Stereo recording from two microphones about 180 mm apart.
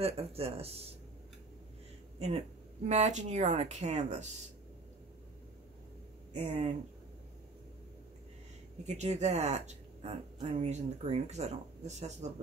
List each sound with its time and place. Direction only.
0.0 s speech: 35° right (ahead or behind)
2.1 s speech: 35° right (ahead or behind)
6.3 s speech: 35° right (ahead or behind)
8.8 s speech: 40° right (ahead or behind)